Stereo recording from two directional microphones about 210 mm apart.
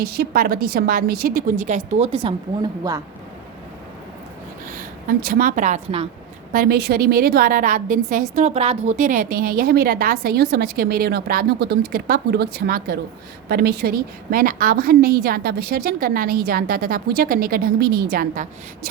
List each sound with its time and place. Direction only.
0.0 s a woman's voice: 45° right (ahead or behind); by 3.0 s 20° right (ahead or behind)
4.7 s a woman's voice: 45° right (ahead or behind)
6.5 s a woman's voice: 45° right (ahead or behind)